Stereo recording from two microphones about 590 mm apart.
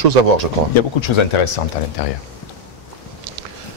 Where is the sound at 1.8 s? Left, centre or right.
Left.